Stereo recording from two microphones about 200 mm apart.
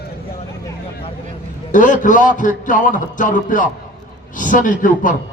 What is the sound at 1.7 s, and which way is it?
A man's voice, 40° left (ahead or behind).